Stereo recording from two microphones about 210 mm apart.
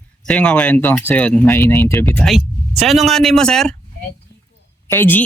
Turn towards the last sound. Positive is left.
turn(degrees=10)  # may be behind; listen again after turning